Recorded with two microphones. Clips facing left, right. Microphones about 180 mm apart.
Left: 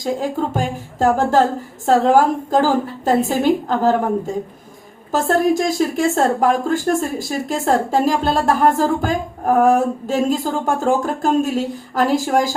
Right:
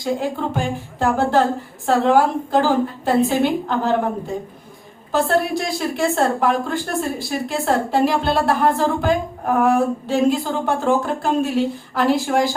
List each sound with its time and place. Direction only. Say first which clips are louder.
0.0 s a woman's voice: left 1 dB; 40° left (ahead or behind)
5.1 s a woman's voice: left 3 dB; 45° left (ahead or behind)